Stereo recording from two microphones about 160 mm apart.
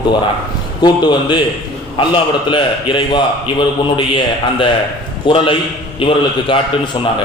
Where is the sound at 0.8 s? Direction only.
30° left (ahead or behind).